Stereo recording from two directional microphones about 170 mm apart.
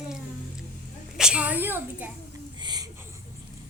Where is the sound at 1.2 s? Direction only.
5° right (ahead or behind).